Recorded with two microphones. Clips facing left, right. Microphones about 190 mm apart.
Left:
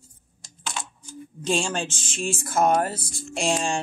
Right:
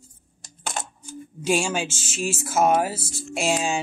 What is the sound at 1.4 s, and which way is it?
Speech, 5° right (ahead or behind).